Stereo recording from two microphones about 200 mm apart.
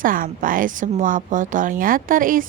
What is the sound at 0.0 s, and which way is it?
A woman's voice, 45° right (ahead or behind).